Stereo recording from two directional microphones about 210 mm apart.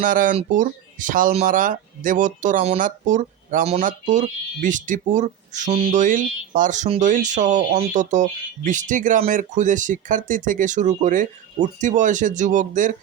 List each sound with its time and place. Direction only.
0.0 s speech: 40° right (ahead or behind)